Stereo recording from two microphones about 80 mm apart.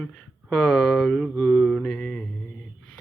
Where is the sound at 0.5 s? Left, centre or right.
Centre.